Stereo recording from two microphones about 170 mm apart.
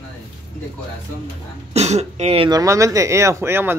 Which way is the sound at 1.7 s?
40° right (ahead or behind).